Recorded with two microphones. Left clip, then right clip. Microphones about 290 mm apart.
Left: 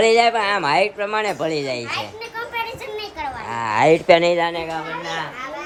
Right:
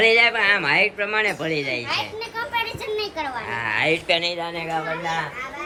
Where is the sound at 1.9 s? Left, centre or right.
Centre.